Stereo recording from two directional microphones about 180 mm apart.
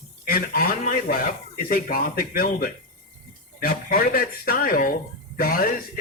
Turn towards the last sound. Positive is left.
turn(degrees=55)  # may be behind; listen again after turning